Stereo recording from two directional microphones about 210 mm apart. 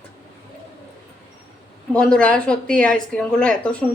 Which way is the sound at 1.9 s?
5° left (ahead or behind).